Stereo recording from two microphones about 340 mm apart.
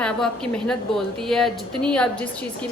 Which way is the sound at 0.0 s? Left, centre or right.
Centre.